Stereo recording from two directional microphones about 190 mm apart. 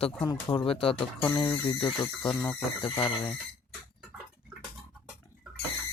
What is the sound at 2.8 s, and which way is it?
Speech, 25° left (ahead or behind).